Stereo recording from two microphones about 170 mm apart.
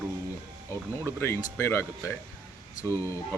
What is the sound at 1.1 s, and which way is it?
Speech, 15° left (ahead or behind).